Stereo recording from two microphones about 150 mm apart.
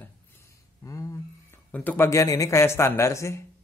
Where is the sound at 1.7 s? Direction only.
10° left (ahead or behind).